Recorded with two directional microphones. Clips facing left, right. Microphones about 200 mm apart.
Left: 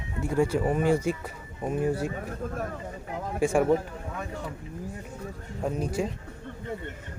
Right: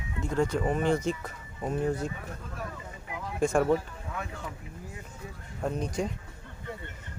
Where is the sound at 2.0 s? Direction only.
50° left (ahead or behind).